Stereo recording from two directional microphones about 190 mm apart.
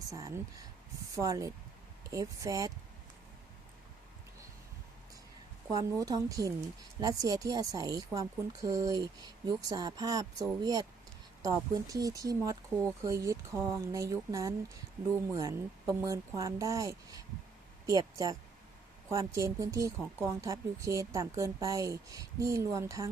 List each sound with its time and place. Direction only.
0.1 s speech: 15° right (ahead or behind)
5.7 s speech: 20° right (ahead or behind)